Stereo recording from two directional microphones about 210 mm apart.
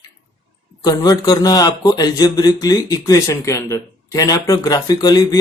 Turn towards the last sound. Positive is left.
turn(degrees=20)  # may be behind; listen again after turning